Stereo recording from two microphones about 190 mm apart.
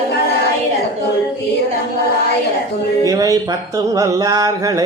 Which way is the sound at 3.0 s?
20° right (ahead or behind).